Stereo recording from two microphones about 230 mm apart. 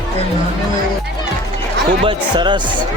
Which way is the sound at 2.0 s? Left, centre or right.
Centre.